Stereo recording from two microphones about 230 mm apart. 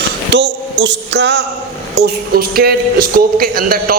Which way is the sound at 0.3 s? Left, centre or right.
Right.